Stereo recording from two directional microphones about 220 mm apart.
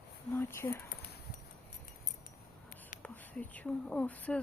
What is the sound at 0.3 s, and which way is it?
Speech, 10° left (ahead or behind).